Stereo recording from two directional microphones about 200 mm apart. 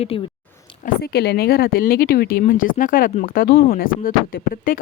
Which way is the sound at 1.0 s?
55° left (ahead or behind).